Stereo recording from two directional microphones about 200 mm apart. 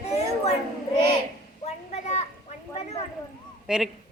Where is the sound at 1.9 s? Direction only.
35° left (ahead or behind).